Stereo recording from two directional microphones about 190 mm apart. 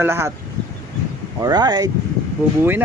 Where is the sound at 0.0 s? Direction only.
15° right (ahead or behind).